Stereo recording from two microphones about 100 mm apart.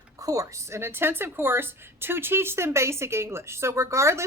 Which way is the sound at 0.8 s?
25° right (ahead or behind).